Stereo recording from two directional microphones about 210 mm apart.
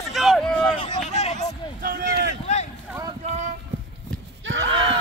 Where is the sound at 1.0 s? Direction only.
30° left (ahead or behind).